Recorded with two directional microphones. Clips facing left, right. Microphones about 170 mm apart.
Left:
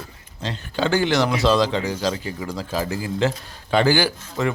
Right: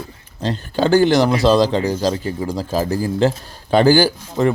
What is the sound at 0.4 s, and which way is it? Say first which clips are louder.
Speech: right 5 dB; 40° right (ahead or behind).